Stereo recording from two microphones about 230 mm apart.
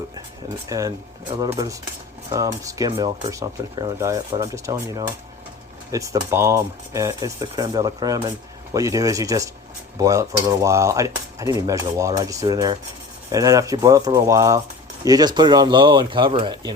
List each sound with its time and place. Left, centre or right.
0.7 s speech: centre